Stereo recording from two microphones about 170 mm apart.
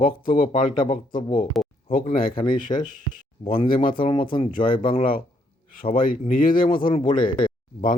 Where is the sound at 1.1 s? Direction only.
30° left (ahead or behind).